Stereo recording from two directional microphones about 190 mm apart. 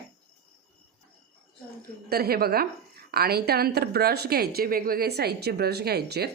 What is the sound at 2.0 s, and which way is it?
A woman's voice, 55° right (ahead or behind).